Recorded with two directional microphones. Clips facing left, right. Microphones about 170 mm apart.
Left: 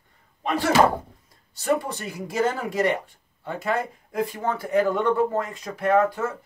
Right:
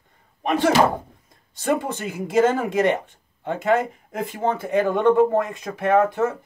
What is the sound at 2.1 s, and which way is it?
Speech, 25° right (ahead or behind).